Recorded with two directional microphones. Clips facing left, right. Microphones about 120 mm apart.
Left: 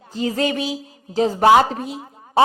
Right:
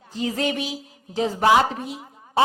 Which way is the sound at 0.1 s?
40° left (ahead or behind).